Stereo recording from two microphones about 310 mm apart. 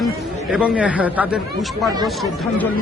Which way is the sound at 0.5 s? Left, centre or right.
Centre.